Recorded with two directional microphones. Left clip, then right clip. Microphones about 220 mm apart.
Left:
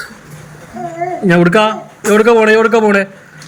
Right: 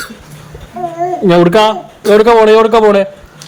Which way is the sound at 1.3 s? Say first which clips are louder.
Right 3 dB; 10° right (ahead or behind).